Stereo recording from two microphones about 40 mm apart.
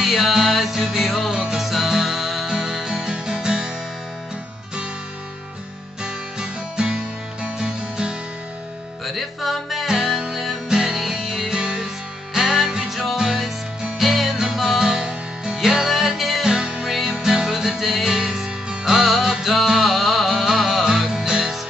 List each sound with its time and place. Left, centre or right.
0.0 s music: centre
1.3 s music: centre
6.0 s music: right
9.0 s music: centre
16.4 s music: centre
16.9 s music: centre
21.1 s music: centre